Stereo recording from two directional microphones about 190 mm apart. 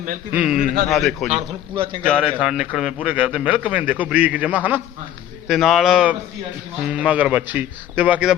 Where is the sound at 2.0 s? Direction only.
Centre (ahead or behind).